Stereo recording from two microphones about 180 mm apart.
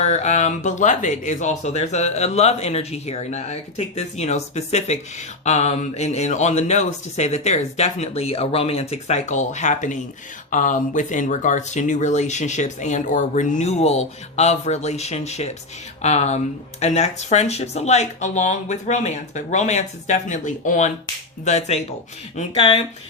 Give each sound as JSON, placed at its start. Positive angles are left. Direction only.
{"t": 0.0, "sound": "speech", "side_deg": 40}